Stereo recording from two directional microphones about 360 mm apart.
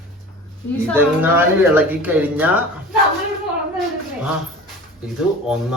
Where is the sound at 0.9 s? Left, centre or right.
Centre.